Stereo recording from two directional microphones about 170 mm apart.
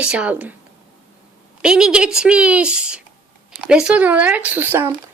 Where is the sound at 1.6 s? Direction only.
5° right (ahead or behind).